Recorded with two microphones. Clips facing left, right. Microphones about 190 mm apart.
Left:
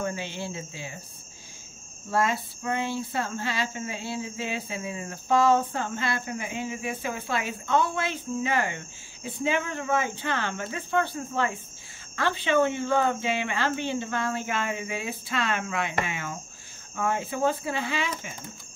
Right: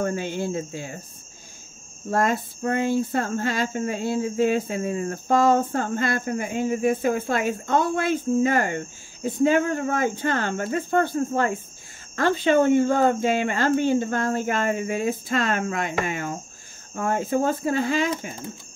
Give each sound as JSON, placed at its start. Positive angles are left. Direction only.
{"t": 0.0, "sound": "cricket", "side_deg": -50}
{"t": 2.0, "sound": "cricket", "side_deg": -45}